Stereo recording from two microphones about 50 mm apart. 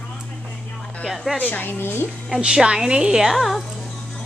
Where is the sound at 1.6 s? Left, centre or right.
Left.